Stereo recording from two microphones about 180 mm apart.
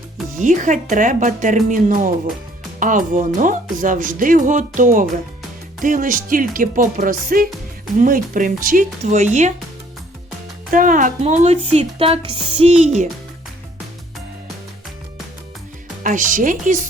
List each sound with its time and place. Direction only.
0.3 s speech: 45° right (ahead or behind)
10.7 s speech: 45° right (ahead or behind)
16.0 s speech: 45° right (ahead or behind)